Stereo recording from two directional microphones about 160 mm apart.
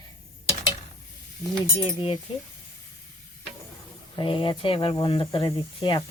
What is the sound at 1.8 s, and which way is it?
Speech, 30° left (ahead or behind).